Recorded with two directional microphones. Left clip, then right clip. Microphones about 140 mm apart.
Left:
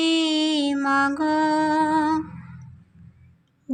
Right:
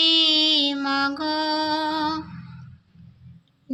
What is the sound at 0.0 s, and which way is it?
Music, 45° left (ahead or behind).